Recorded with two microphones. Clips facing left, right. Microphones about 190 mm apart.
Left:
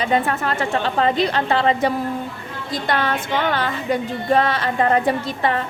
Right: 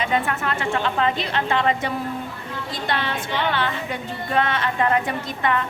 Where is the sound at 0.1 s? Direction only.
35° left (ahead or behind).